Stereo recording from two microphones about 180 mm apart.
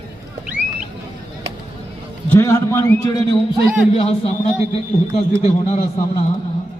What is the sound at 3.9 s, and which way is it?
A man's voice, 35° left (ahead or behind).